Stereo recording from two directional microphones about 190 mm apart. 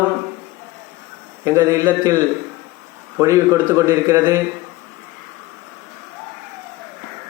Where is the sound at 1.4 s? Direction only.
15° right (ahead or behind).